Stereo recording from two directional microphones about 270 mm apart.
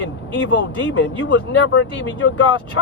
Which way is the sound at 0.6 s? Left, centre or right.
Left.